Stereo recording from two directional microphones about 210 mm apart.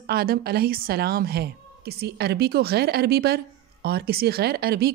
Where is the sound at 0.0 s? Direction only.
45° right (ahead or behind).